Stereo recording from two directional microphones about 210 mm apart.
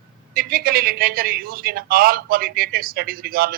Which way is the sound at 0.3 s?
45° right (ahead or behind).